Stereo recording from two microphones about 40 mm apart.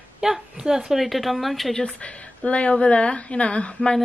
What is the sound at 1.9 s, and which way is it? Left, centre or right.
A woman's voice, left.